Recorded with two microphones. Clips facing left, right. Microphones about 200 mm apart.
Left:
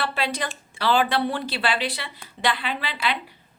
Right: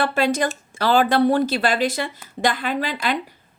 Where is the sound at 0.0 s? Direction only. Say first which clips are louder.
Right 7 dB; 45° right (ahead or behind).